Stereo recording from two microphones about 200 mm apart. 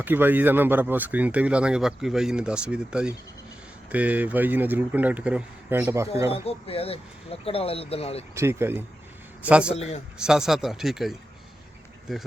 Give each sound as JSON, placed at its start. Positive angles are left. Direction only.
{"t": 0.0, "sound": "a man's voice", "side_deg": -10}
{"t": 6.7, "sound": "speech", "side_deg": 30}
{"t": 8.4, "sound": "a man's voice", "side_deg": -10}
{"t": 9.7, "sound": "speech", "side_deg": 30}
{"t": 10.2, "sound": "speech", "side_deg": -5}